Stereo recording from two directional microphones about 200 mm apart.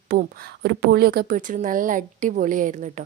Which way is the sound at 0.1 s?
50° right (ahead or behind).